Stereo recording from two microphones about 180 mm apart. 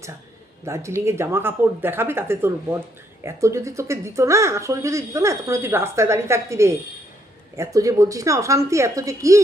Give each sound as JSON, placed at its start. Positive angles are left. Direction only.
{"t": 0.6, "sound": "speech", "side_deg": -15}